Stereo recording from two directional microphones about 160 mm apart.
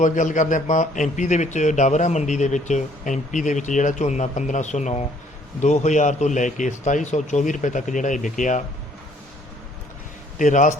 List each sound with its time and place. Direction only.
0.0 s a man's voice: 50° left (ahead or behind)
10.3 s speech: 50° left (ahead or behind)